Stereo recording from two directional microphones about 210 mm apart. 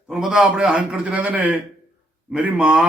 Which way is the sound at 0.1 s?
5° right (ahead or behind).